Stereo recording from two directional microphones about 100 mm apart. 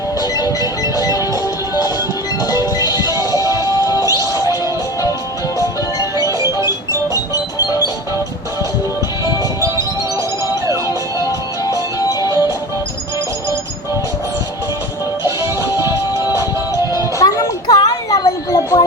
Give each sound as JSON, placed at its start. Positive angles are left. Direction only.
{"t": 0.2, "sound": "music", "side_deg": 40}
{"t": 2.5, "sound": "music", "side_deg": 40}
{"t": 4.0, "sound": "music", "side_deg": -35}
{"t": 6.1, "sound": "music", "side_deg": -35}
{"t": 9.2, "sound": "music", "side_deg": -35}
{"t": 15.8, "sound": "music", "side_deg": -30}
{"t": 17.2, "sound": "music", "side_deg": 35}